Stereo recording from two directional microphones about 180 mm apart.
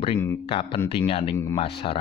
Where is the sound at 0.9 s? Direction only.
30° left (ahead or behind).